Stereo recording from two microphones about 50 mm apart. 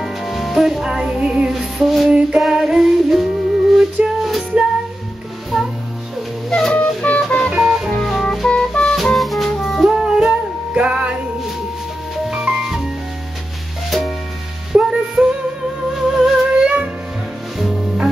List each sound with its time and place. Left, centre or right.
0.0 s music: centre
1.5 s music: centre
6.5 s music: left
8.0 s music: centre
8.5 s music: centre
8.9 s music: centre
9.8 s music: centre
12.3 s music: centre
13.8 s music: centre
14.7 s music: centre